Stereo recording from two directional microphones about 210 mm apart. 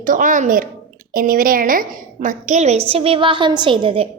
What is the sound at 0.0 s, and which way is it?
A woman's voice, 40° right (ahead or behind).